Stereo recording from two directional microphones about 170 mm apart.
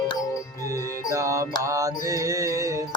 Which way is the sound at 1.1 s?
20° right (ahead or behind).